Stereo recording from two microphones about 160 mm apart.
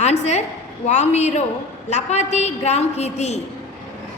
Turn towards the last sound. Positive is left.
turn(degrees=45)  # may be behind; listen again after turning